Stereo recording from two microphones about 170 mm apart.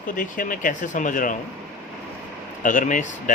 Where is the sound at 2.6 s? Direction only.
50° left (ahead or behind).